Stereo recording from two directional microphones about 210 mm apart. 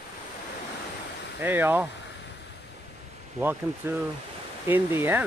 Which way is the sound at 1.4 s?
10° right (ahead or behind).